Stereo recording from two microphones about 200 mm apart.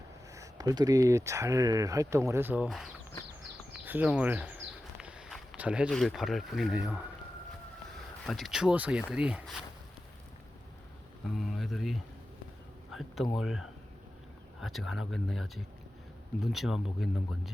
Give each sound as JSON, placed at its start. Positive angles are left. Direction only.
{"t": 0.3, "sound": "speech", "side_deg": -20}
{"t": 3.7, "sound": "a sound", "side_deg": -10}
{"t": 8.3, "sound": "speech", "side_deg": 0}
{"t": 11.3, "sound": "speech", "side_deg": 0}
{"t": 12.9, "sound": "a sound", "side_deg": 0}
{"t": 13.3, "sound": "speech", "side_deg": 0}